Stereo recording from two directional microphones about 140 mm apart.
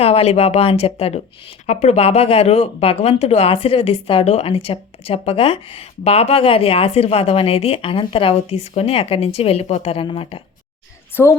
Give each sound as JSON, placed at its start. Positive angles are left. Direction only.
{"t": 0.0, "sound": "a woman's voice", "side_deg": 45}
{"t": 11.1, "sound": "speech", "side_deg": 15}